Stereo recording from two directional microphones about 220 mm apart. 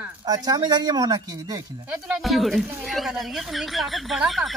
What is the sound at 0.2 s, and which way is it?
Speech, 15° right (ahead or behind).